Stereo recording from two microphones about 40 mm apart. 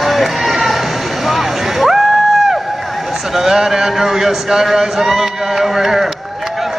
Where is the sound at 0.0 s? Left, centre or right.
Centre.